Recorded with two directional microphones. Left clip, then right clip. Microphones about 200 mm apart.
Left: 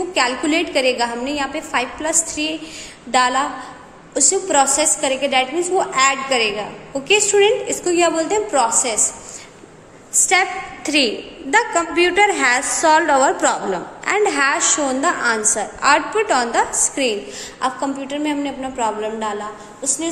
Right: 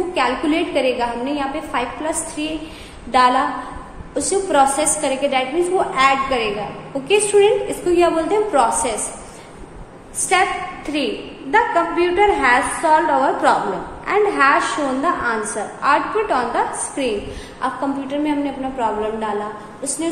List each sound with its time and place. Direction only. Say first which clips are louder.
0.1 s a woman's voice: left 2 dB; 35° left (ahead or behind)
11.5 s a woman's voice: even; 45° left (ahead or behind)